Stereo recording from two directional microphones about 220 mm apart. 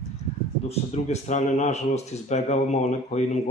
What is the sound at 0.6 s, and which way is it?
Speech, 30° left (ahead or behind).